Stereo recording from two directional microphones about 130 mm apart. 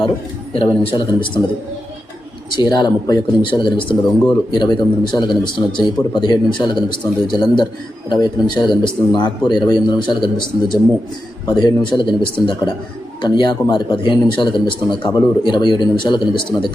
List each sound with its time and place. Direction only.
0.5 s a man's voice: 45° left (ahead or behind)
2.5 s speech: 35° left (ahead or behind)